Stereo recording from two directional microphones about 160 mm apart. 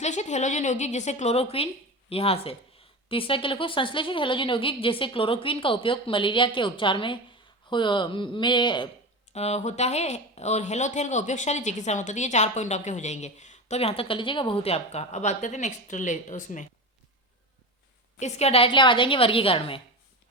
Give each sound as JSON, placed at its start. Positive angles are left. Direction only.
{"t": 0.0, "sound": "speech", "side_deg": 45}
{"t": 9.3, "sound": "speech", "side_deg": 45}
{"t": 18.2, "sound": "speech", "side_deg": 45}